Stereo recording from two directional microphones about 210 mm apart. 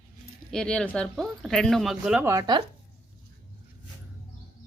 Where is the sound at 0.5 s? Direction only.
5° left (ahead or behind).